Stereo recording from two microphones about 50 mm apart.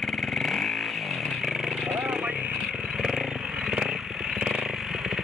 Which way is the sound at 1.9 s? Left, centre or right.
Right.